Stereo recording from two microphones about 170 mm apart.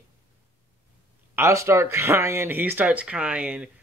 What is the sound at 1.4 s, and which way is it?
Speech, 15° right (ahead or behind).